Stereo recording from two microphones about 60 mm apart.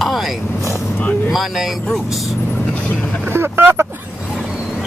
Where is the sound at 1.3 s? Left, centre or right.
Centre.